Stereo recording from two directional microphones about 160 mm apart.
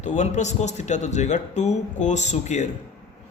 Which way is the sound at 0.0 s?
45° left (ahead or behind).